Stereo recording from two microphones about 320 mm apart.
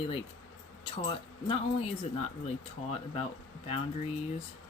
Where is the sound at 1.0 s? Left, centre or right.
Centre.